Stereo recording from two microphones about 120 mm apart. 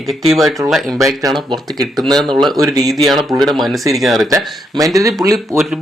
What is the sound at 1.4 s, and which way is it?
Speech, 35° right (ahead or behind).